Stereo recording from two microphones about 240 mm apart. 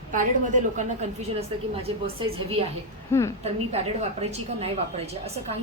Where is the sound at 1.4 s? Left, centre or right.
Right.